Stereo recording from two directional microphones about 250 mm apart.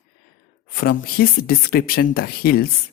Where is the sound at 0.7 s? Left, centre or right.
Left.